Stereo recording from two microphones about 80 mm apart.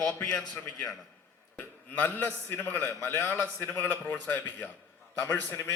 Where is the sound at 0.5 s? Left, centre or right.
Left.